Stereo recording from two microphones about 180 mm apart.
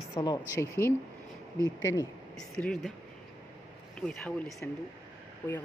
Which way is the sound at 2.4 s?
5° left (ahead or behind).